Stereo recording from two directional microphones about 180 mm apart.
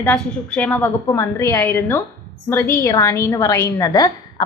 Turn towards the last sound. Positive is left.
turn(degrees=20)  # may be behind; listen again after turning